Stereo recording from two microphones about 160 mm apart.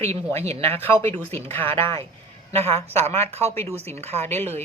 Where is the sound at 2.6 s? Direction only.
40° right (ahead or behind).